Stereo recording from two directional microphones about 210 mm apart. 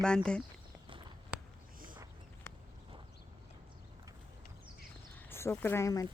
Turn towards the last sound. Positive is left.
turn(degrees=15)  # may be behind; listen again after turning